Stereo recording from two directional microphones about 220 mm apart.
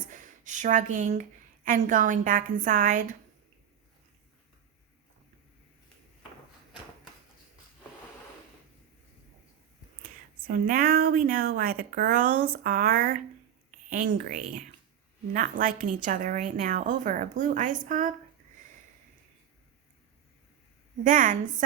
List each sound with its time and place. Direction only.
0.1 s speech: 35° right (ahead or behind)
10.0 s a woman's voice: 40° right (ahead or behind)
21.0 s a woman's voice: 35° right (ahead or behind)